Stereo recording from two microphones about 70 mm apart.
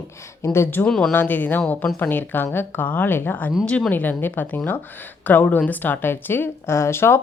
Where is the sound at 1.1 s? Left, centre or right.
Left.